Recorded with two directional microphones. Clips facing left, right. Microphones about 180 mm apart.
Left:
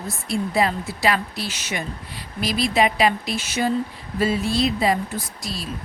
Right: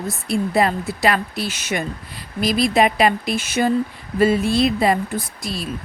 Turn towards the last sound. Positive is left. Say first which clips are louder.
# right 4 dB
turn(degrees=-55)  # may be behind; listen again after turning